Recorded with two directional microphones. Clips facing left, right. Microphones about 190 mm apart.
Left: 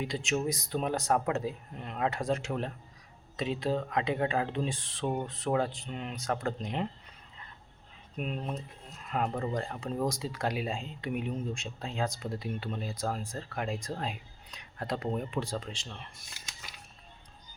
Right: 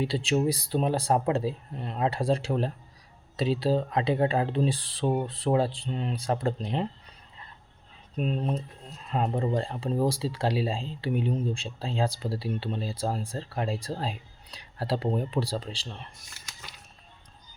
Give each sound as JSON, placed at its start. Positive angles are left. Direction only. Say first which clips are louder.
{"t": 0.0, "sound": "speech", "louder": "right 6 dB", "side_deg": -30}
{"t": 8.1, "sound": "speech", "louder": "right 6 dB", "side_deg": -35}